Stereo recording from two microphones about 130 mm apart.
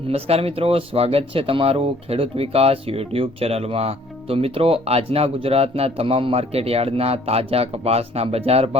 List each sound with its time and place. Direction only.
0.1 s speech: 50° right (ahead or behind)